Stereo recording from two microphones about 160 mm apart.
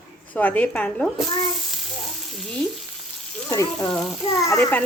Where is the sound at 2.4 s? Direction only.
5° left (ahead or behind).